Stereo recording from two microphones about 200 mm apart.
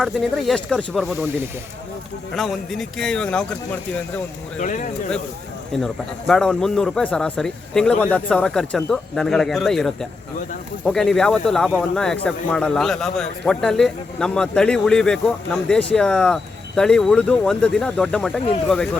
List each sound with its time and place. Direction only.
0.0 s speech: centre (ahead or behind)
2.3 s speech: centre (ahead or behind)
4.6 s speech: 40° left (ahead or behind)
5.7 s speech: centre (ahead or behind)